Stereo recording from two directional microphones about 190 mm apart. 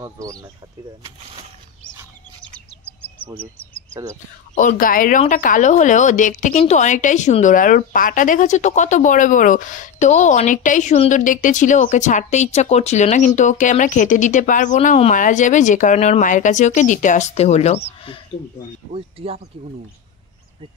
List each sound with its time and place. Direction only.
0.0 s speech: 20° right (ahead or behind)
4.6 s a woman's voice: 45° left (ahead or behind)
18.9 s speech: 30° right (ahead or behind)